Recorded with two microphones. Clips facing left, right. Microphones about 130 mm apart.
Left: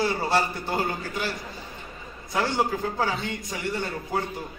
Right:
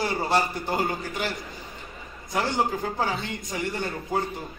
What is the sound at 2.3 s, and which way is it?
Speech, 15° right (ahead or behind).